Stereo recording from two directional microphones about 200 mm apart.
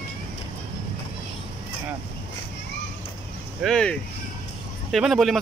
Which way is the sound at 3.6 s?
5° left (ahead or behind).